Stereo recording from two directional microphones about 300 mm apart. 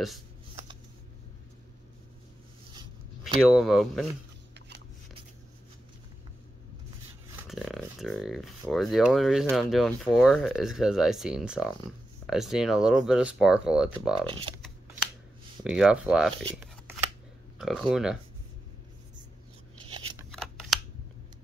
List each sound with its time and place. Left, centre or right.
2.7 s a sound: centre
3.4 s speech: centre
4.6 s shuffling cards: right
7.4 s speech: centre
14.2 s speech: centre
15.6 s speech: centre
16.5 s shuffling cards: centre
17.6 s speech: centre
19.8 s a sound: centre
20.2 s scissors: centre